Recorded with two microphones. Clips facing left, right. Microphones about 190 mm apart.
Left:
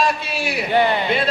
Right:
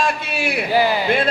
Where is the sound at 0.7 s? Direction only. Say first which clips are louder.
Even; 5° right (ahead or behind).